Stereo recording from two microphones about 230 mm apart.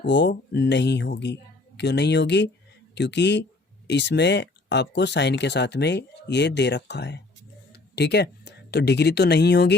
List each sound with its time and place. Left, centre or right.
0.0 s speech: left